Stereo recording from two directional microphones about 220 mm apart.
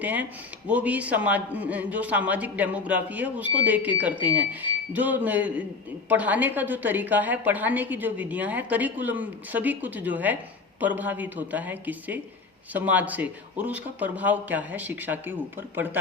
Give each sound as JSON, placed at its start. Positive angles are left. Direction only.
{"t": 0.0, "sound": "a woman's voice", "side_deg": -5}